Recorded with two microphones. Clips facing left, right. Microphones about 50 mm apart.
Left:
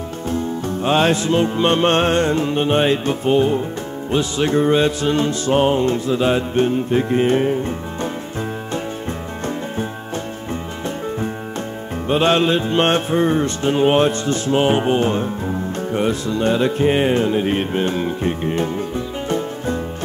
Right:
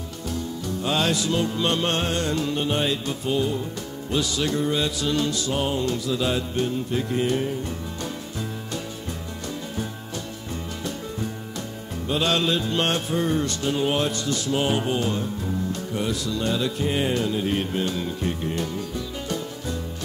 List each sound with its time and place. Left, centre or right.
0.3 s music: left
12.1 s music: left